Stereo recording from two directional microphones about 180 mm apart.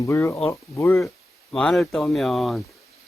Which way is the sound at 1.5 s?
Centre (ahead or behind).